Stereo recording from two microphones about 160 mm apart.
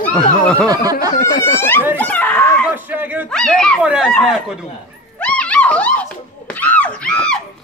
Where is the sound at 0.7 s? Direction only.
25° right (ahead or behind).